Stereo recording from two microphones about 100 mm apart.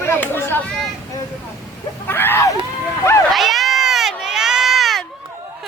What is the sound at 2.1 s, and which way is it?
Speech, 20° left (ahead or behind).